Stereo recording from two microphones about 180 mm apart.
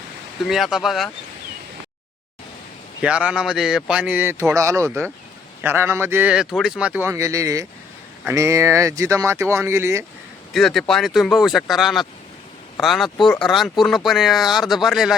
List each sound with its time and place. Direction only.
0.4 s speech: centre (ahead or behind)
3.0 s speech: 5° right (ahead or behind)
10.5 s speech: centre (ahead or behind)